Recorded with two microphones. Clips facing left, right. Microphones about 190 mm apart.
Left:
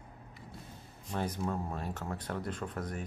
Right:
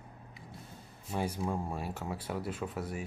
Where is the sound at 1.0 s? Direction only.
10° right (ahead or behind).